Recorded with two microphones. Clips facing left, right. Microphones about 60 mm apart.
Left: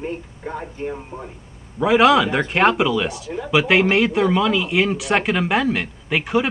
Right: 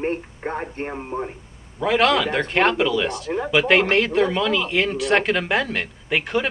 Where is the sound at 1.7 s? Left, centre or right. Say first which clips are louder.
Left 4 dB; centre.